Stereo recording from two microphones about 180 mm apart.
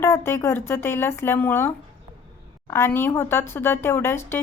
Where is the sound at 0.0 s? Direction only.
15° left (ahead or behind).